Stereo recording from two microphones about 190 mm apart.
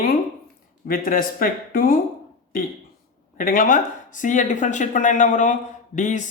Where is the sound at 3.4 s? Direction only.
45° left (ahead or behind).